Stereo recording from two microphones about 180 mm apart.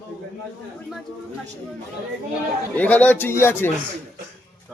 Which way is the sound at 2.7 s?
10° left (ahead or behind).